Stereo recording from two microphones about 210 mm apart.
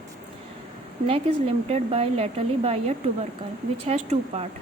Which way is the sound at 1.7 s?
30° right (ahead or behind).